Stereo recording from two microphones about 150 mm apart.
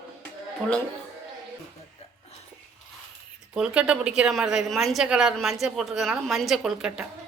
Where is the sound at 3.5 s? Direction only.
5° right (ahead or behind).